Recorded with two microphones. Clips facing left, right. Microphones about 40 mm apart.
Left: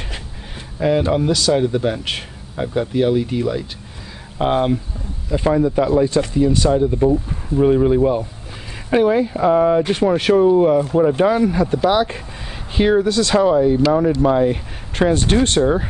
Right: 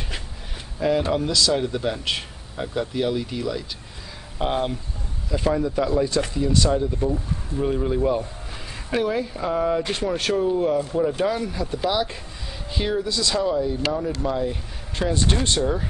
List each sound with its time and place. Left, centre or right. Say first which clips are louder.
0.7 s speech: left 5 dB; left